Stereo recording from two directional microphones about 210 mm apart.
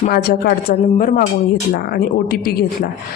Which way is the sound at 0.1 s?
45° left (ahead or behind).